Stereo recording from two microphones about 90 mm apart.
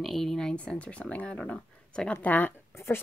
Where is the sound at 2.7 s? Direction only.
30° left (ahead or behind).